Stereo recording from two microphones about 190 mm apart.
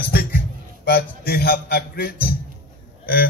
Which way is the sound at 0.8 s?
55° left (ahead or behind).